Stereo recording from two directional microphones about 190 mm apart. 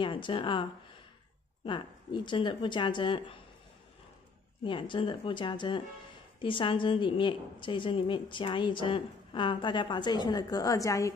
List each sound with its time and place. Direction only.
0.0 s a woman's voice: 25° left (ahead or behind)
1.7 s a woman's voice: 25° left (ahead or behind)
4.6 s a woman's voice: 25° left (ahead or behind)